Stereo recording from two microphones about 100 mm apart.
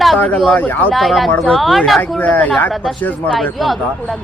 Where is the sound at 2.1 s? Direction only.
15° left (ahead or behind).